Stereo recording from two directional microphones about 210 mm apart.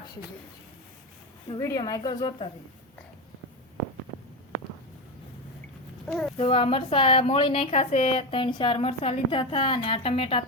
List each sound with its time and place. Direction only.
1.5 s a woman's voice: 15° left (ahead or behind)
6.1 s speech: centre (ahead or behind)
6.3 s a woman's voice: 25° left (ahead or behind)